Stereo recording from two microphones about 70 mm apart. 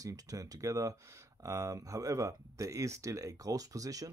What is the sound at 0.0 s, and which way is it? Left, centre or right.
Speech, right.